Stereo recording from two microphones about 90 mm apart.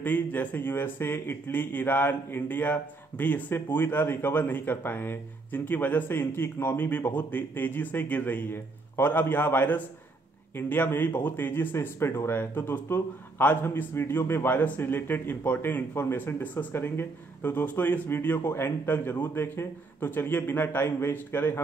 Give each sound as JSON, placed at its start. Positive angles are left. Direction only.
{"t": 0.0, "sound": "speech", "side_deg": 20}